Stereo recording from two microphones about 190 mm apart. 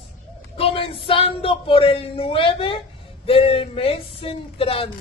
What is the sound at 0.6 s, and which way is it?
Speech, 30° left (ahead or behind).